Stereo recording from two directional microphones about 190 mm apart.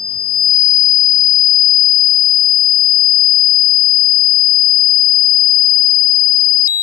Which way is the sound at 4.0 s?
Centre (ahead or behind).